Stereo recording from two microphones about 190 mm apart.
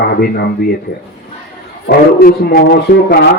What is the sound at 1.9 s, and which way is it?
A man's voice, 55° left (ahead or behind).